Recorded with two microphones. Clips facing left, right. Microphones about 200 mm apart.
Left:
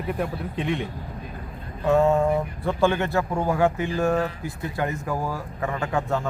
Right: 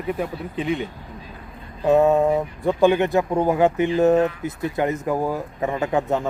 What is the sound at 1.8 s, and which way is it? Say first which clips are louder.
Speech: right 3 dB; 15° right (ahead or behind).